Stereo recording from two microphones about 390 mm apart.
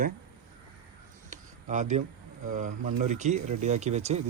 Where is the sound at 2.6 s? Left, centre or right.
Centre.